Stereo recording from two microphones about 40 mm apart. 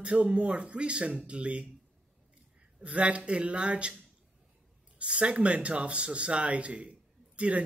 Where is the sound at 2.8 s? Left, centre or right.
Right.